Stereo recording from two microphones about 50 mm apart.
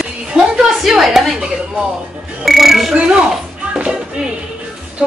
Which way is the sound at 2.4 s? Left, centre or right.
Centre.